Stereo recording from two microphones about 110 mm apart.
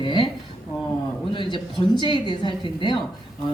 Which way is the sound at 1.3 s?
45° left (ahead or behind).